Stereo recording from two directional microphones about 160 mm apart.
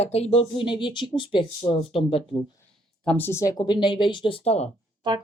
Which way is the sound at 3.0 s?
10° left (ahead or behind).